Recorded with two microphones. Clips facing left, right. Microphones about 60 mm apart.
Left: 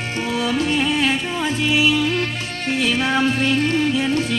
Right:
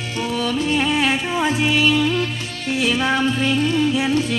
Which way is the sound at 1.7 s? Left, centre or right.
Centre.